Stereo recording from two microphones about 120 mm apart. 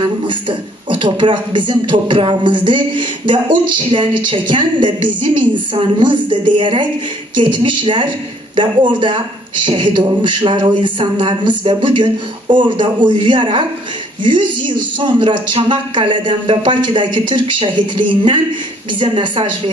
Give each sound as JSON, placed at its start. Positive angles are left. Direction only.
{"t": 0.0, "sound": "a woman's voice", "side_deg": -40}